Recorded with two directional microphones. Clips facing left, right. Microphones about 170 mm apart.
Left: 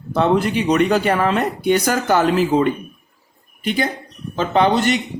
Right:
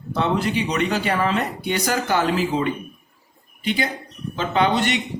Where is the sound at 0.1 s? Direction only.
50° left (ahead or behind).